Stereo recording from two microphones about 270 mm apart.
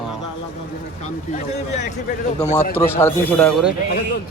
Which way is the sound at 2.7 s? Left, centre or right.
Centre.